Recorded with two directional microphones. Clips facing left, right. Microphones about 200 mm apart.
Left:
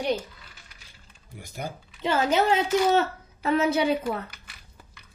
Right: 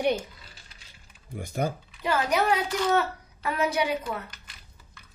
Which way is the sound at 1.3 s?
55° right (ahead or behind).